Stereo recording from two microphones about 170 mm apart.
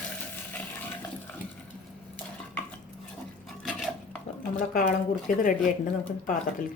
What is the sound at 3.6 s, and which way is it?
Stir, 5° left (ahead or behind).